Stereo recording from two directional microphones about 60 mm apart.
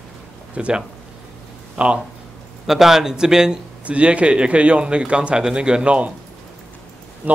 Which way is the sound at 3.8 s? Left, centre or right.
Right.